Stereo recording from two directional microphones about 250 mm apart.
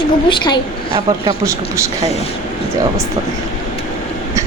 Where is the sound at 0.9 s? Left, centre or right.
Centre.